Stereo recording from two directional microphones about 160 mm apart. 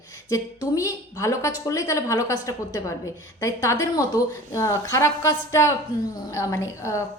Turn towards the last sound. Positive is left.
turn(degrees=20)  # may be behind; listen again after turning